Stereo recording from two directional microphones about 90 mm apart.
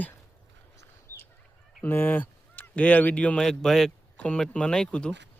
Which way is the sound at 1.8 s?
20° left (ahead or behind).